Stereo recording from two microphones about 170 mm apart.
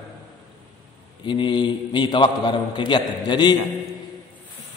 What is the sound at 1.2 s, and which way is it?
A man's voice, 30° left (ahead or behind).